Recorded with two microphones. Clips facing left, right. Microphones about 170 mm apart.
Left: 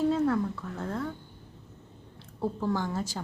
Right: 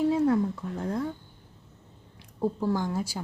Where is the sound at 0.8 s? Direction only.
15° right (ahead or behind).